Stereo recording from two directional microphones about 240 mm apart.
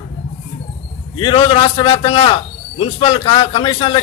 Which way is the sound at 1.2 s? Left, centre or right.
Left.